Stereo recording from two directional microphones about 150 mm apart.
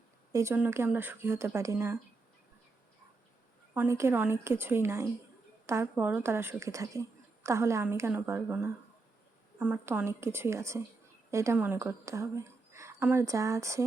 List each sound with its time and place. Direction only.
0.3 s speech: 15° right (ahead or behind)
3.8 s a woman's voice: 20° right (ahead or behind)